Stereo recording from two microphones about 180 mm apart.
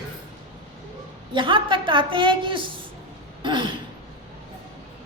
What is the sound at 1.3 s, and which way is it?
A woman's voice, 25° right (ahead or behind).